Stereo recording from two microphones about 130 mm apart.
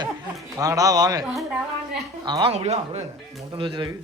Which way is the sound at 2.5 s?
55° right (ahead or behind).